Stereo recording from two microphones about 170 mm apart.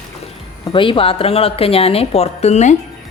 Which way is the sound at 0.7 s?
30° left (ahead or behind).